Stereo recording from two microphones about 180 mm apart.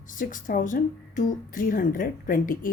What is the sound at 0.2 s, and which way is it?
Speech, 50° left (ahead or behind).